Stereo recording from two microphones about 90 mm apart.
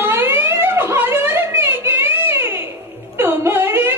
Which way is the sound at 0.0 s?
30° right (ahead or behind).